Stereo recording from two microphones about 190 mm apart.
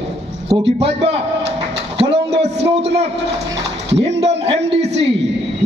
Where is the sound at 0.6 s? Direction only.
30° right (ahead or behind).